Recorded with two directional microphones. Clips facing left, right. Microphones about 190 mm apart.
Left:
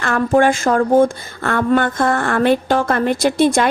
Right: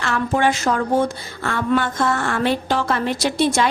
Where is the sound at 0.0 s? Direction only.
50° left (ahead or behind).